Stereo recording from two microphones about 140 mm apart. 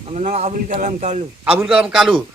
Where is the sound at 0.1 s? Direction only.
55° right (ahead or behind).